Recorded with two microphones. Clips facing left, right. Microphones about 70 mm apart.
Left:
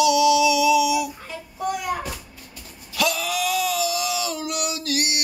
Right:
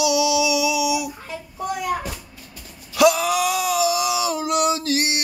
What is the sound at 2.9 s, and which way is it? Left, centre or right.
Wail, right.